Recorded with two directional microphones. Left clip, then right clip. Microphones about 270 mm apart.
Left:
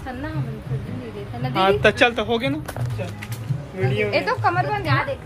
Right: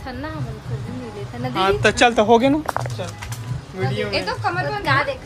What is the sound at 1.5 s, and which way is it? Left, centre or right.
Speech, centre.